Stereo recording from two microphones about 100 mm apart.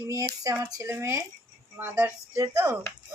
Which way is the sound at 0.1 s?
35° right (ahead or behind).